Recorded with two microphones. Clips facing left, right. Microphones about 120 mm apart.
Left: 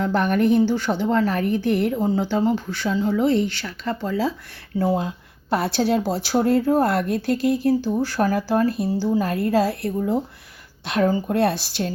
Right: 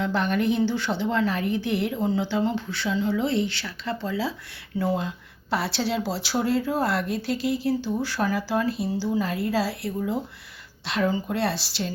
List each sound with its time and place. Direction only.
0.0 s speech: 50° left (ahead or behind)